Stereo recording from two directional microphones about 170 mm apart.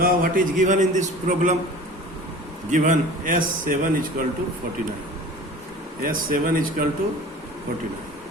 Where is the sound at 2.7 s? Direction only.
50° right (ahead or behind).